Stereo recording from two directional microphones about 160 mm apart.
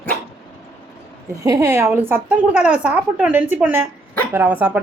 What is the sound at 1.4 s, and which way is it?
A woman's voice, 20° right (ahead or behind).